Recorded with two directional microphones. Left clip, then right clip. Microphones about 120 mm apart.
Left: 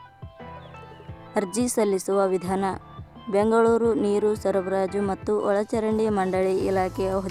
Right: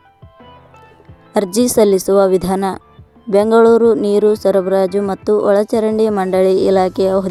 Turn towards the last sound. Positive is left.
turn(degrees=-40)  # may be behind; listen again after turning